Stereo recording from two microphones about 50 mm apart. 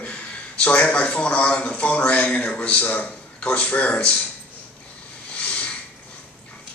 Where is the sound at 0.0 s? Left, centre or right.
Left.